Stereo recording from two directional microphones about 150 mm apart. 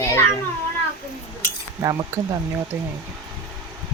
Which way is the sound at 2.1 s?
20° right (ahead or behind).